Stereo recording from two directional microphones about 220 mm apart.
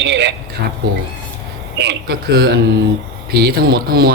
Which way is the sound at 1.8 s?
50° right (ahead or behind).